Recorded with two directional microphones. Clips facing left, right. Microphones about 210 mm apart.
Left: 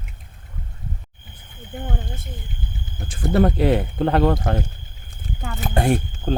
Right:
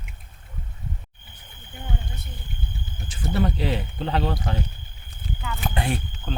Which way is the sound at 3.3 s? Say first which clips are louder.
Left 8 dB; 55° left (ahead or behind).